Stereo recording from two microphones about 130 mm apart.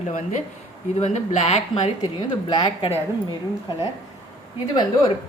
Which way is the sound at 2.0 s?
35° left (ahead or behind).